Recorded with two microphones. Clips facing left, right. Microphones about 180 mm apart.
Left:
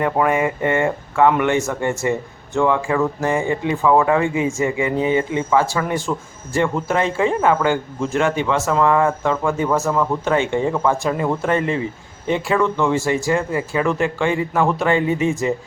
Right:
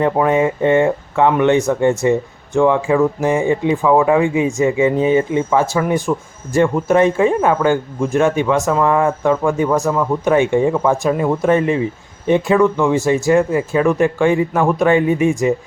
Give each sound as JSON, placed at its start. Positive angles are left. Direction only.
{"t": 0.0, "sound": "speech", "side_deg": -20}